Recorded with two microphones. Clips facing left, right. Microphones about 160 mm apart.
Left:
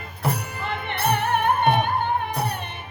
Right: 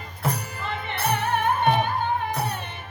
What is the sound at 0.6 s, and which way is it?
Music, 60° left (ahead or behind).